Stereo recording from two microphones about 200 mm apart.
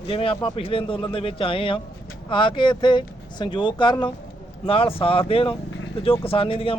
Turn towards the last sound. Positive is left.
turn(degrees=25)  # may be behind; listen again after turning